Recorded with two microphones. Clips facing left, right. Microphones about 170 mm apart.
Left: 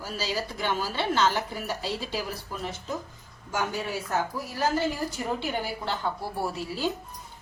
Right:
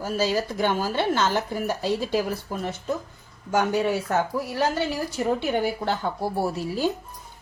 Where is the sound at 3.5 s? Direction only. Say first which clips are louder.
Right 8 dB; 60° right (ahead or behind).